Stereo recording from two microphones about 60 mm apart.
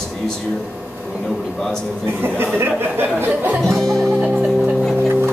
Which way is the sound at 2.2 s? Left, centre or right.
Right.